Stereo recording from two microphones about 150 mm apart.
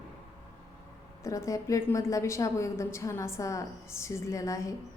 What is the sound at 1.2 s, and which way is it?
A woman's voice, 20° left (ahead or behind).